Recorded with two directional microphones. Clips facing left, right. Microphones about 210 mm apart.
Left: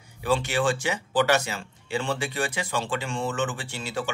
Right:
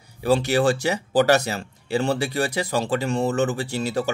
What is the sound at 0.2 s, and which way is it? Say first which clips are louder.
Speech: right 5 dB; 40° right (ahead or behind).